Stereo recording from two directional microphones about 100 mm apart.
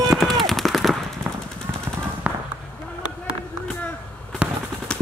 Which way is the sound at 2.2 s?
10° right (ahead or behind).